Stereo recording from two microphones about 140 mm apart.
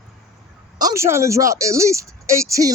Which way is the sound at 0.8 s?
25° right (ahead or behind).